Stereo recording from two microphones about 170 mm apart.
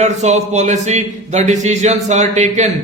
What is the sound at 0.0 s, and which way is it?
Speech, 40° right (ahead or behind).